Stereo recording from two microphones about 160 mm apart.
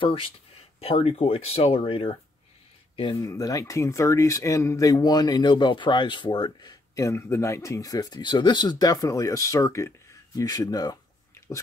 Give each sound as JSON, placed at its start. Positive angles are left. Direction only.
{"t": 0.0, "sound": "speech", "side_deg": 35}
{"t": 3.2, "sound": "speech", "side_deg": 20}